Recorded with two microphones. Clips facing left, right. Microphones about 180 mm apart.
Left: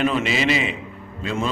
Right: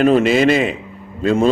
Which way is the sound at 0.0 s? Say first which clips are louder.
Right 9 dB; 45° right (ahead or behind).